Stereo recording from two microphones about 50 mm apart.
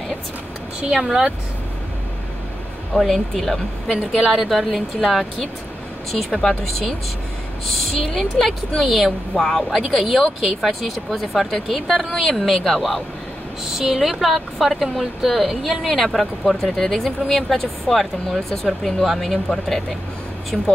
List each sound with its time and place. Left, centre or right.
0.7 s speech: centre
2.9 s speech: centre
3.9 s speech: centre
4.4 s speech: centre
7.6 s speech: centre
10.6 s speech: centre